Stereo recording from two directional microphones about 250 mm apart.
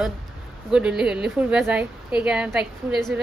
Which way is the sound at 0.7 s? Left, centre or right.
Centre.